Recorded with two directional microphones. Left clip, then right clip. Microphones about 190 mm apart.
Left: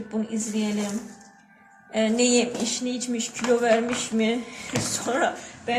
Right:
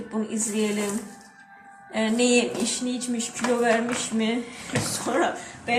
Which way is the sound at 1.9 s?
40° left (ahead or behind).